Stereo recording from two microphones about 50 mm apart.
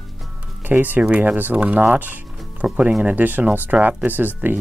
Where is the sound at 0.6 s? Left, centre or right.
Right.